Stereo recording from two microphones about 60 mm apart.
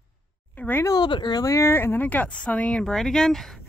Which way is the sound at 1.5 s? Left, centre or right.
Left.